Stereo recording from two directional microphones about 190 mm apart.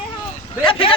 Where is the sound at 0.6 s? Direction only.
30° left (ahead or behind).